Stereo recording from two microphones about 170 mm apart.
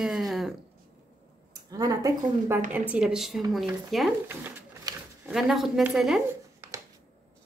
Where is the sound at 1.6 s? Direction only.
20° right (ahead or behind).